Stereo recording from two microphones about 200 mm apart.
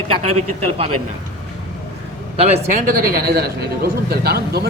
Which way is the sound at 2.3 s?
30° right (ahead or behind).